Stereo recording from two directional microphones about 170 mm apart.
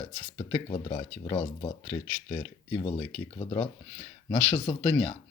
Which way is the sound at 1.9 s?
20° left (ahead or behind).